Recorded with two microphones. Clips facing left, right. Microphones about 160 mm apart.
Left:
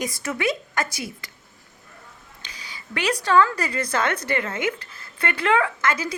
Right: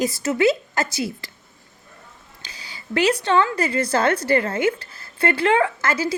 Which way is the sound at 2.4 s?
30° right (ahead or behind).